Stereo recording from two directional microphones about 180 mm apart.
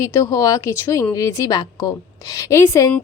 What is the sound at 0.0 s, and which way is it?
Speech, 15° left (ahead or behind).